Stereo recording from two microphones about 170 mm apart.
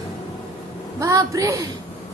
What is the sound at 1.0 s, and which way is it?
Speech, 20° right (ahead or behind).